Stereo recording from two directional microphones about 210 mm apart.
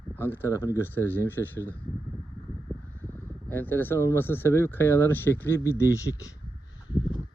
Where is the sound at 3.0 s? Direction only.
10° left (ahead or behind).